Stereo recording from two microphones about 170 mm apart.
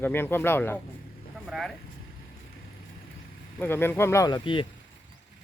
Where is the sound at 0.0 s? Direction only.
10° left (ahead or behind).